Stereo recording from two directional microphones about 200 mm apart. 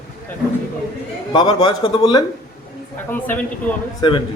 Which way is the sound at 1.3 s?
20° left (ahead or behind).